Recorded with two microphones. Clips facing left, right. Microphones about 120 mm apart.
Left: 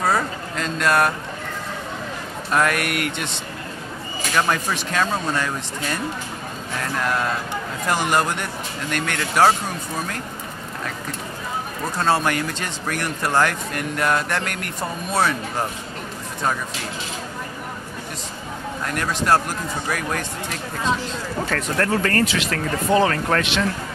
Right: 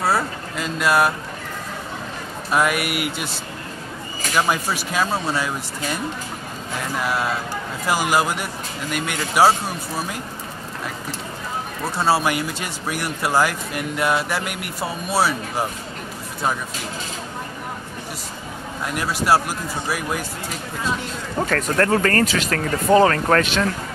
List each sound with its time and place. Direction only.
0.0 s a sound: 5° right (ahead or behind)
2.5 s speech: 5° right (ahead or behind)
4.4 s speech: 5° right (ahead or behind)
11.8 s speech: 10° right (ahead or behind)
18.9 s speech: 10° right (ahead or behind)
21.5 s speech: 45° right (ahead or behind)